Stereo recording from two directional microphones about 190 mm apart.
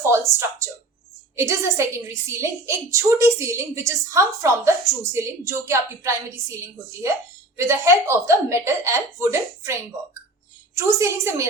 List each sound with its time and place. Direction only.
0.1 s a woman's voice: 15° right (ahead or behind)
10.8 s a woman's voice: 15° right (ahead or behind)